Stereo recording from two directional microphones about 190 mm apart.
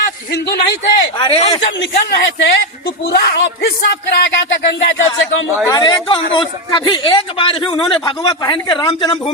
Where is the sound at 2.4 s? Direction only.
55° left (ahead or behind).